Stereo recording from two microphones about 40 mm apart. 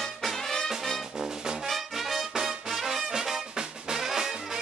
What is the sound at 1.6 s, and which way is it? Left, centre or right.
Music, centre.